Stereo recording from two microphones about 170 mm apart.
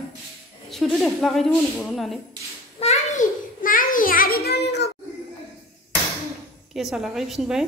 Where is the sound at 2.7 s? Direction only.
40° left (ahead or behind); by 4.9 s 85° left.